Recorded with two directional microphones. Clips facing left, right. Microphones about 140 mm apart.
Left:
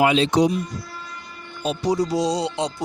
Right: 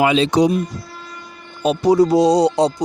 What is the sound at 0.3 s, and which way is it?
Speech, 90° right.